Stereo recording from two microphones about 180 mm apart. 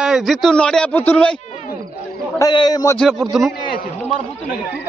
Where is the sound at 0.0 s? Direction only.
Centre (ahead or behind).